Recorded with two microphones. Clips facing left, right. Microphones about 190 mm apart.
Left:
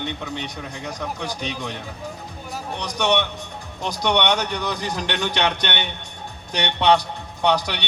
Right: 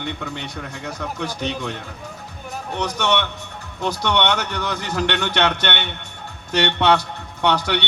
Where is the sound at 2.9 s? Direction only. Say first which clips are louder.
Left 2 dB; 15° left (ahead or behind).